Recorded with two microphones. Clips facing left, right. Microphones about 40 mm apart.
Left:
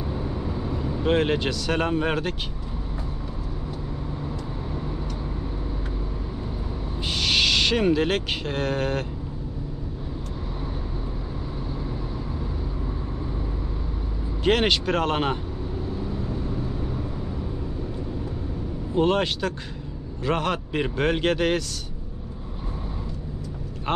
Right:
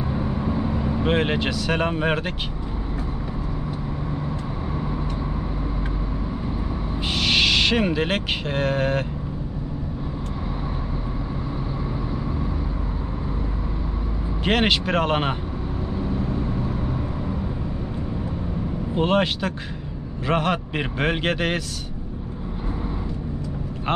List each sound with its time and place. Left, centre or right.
0.1 s vehicle: right
1.1 s a man's voice: centre
7.1 s speech: centre
14.4 s a man's voice: centre
18.9 s a man's voice: centre